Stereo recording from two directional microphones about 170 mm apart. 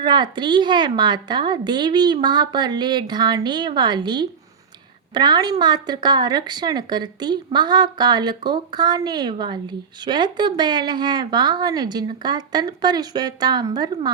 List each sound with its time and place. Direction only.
0.0 s a woman's voice: 25° right (ahead or behind)